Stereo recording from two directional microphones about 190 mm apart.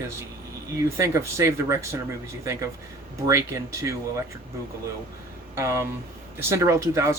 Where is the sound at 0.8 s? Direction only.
15° right (ahead or behind).